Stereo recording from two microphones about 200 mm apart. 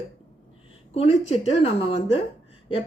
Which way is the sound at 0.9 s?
30° left (ahead or behind).